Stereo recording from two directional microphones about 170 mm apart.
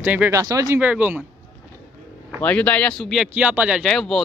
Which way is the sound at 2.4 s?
10° left (ahead or behind).